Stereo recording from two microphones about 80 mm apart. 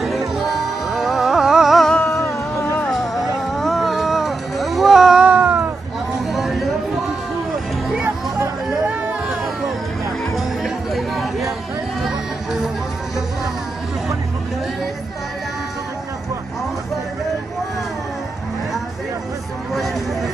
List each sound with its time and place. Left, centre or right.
0.4 s music: centre
2.1 s music: left
2.9 s music: centre
6.3 s a sound: centre
8.0 s music: right
10.3 s music: centre